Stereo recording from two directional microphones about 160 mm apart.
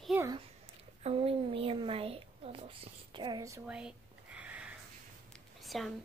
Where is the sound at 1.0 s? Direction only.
35° right (ahead or behind).